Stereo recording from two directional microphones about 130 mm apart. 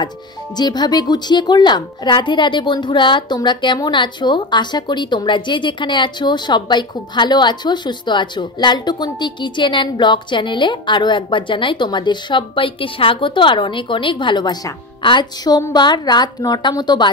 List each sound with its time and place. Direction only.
0.6 s a woman's voice: 35° left (ahead or behind)